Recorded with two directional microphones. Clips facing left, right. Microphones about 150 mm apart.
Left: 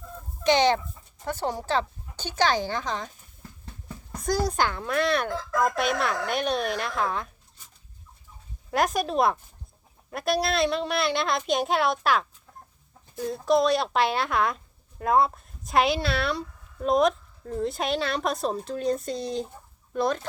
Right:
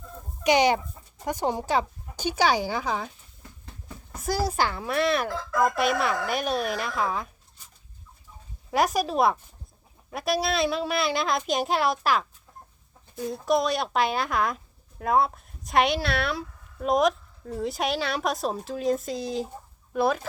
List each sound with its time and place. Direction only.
0.4 s speech: 10° right (ahead or behind)
4.1 s speech: 5° right (ahead or behind)
8.7 s speech: centre (ahead or behind)